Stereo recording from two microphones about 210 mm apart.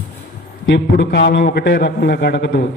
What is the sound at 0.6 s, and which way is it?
A man's voice, 60° left (ahead or behind).